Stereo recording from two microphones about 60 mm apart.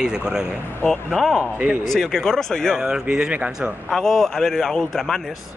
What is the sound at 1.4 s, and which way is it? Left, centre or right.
Speech, right.